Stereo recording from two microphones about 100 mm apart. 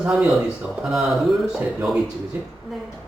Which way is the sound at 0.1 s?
Centre (ahead or behind).